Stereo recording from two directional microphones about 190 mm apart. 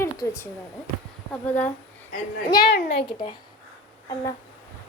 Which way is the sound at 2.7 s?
60° left (ahead or behind).